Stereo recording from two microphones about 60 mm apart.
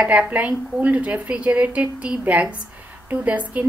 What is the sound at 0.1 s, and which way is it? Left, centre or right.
A woman's voice, right.